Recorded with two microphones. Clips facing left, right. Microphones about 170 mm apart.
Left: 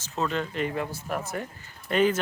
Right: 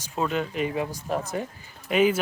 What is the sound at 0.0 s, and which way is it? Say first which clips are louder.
Speech: right 2 dB; 10° right (ahead or behind).